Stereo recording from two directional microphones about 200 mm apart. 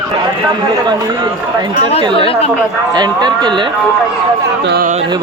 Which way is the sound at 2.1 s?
25° left (ahead or behind).